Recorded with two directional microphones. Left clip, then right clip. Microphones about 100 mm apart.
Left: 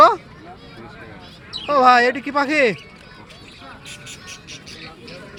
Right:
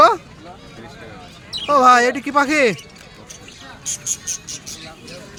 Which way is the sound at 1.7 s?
25° right (ahead or behind).